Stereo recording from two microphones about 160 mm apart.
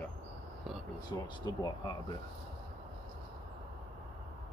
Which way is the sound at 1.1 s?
25° left (ahead or behind).